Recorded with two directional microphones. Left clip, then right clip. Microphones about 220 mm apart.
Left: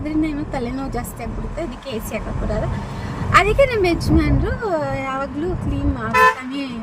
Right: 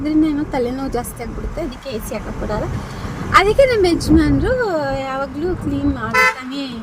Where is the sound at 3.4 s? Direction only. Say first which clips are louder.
Right 3 dB; 15° right (ahead or behind).